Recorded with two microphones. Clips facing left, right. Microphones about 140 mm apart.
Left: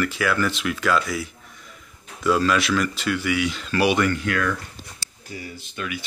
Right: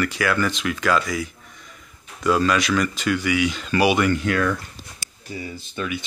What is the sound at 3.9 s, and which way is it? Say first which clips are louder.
Speech: right 2 dB; 20° right (ahead or behind).